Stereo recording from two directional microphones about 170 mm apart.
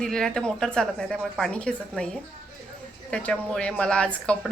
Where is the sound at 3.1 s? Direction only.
5° left (ahead or behind).